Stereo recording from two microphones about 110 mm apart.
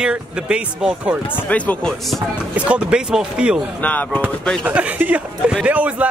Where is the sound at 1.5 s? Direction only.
10° left (ahead or behind).